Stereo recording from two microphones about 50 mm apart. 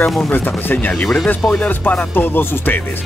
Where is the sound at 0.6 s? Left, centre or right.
Left.